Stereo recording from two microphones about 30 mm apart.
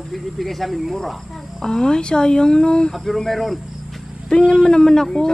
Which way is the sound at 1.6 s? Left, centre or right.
Left.